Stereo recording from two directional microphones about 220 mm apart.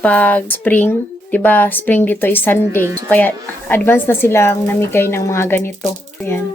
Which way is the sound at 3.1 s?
10° left (ahead or behind).